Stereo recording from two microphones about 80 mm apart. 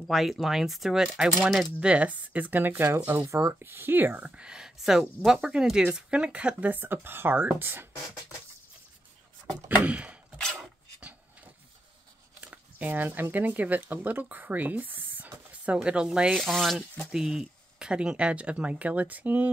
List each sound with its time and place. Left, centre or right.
0.0 s speech: centre; by 7.9 s right
9.8 s speech: centre
10.5 s a sound: centre
12.4 s speech: centre
15.7 s speech: centre